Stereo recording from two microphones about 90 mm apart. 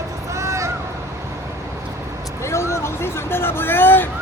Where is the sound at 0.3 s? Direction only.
35° right (ahead or behind).